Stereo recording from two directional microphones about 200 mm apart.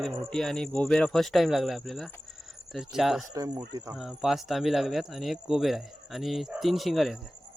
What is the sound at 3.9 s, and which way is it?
Speech, 5° right (ahead or behind).